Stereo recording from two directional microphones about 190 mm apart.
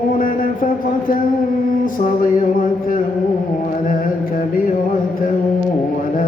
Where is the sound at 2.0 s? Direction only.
45° left (ahead or behind).